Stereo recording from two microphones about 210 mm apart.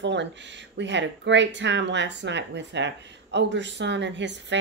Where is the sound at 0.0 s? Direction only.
55° right (ahead or behind).